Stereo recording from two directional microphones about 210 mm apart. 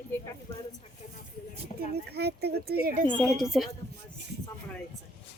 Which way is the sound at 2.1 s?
50° right (ahead or behind).